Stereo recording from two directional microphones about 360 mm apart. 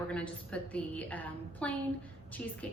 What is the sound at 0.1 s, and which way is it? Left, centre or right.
A woman's voice, centre.